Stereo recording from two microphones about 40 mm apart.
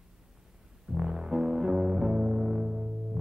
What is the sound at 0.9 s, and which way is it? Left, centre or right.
Music, centre.